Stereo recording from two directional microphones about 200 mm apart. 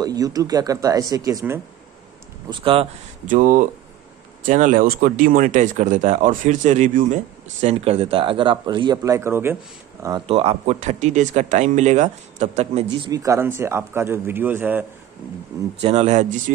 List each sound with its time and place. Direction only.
0.0 s a man's voice: 20° right (ahead or behind)
2.5 s speech: 25° right (ahead or behind)
3.3 s speech: 40° right (ahead or behind); by 9.6 s 10° right (ahead or behind)
10.0 s speech: 25° right (ahead or behind)
13.1 s a man's voice: 15° right (ahead or behind)
15.8 s speech: 30° right (ahead or behind)